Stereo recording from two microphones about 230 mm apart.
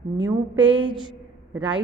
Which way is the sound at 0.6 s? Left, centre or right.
Right.